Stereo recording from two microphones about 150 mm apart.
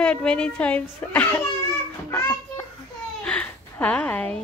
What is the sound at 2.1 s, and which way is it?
Children playing, 15° left (ahead or behind).